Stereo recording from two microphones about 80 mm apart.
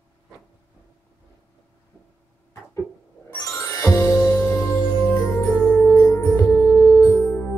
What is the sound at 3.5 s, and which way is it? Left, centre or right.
Music, left.